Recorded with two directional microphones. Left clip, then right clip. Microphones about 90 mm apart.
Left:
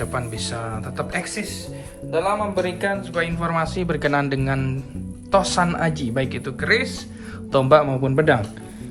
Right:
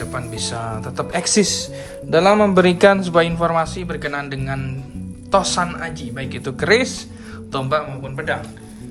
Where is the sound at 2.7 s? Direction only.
85° right.